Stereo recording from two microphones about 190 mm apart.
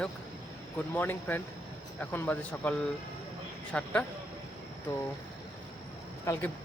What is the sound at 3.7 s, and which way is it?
Speech, 10° left (ahead or behind).